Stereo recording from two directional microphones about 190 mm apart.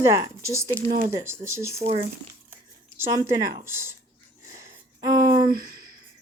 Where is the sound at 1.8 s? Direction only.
35° right (ahead or behind).